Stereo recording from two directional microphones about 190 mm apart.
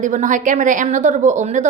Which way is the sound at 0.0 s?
40° right (ahead or behind).